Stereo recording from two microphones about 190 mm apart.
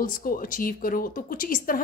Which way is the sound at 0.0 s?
50° left (ahead or behind).